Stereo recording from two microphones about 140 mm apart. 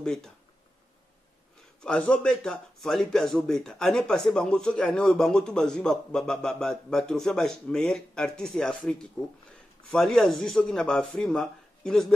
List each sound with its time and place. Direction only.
0.0 s speech: 5° left (ahead or behind)
1.8 s a man's voice: 10° left (ahead or behind)